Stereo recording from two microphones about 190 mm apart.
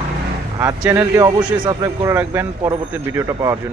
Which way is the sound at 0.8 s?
10° right (ahead or behind).